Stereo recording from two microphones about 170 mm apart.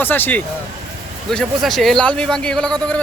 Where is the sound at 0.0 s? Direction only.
10° left (ahead or behind).